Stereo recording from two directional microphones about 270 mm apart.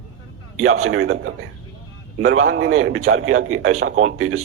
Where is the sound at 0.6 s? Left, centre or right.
Right.